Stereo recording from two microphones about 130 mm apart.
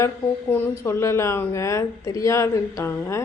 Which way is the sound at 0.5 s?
15° left (ahead or behind).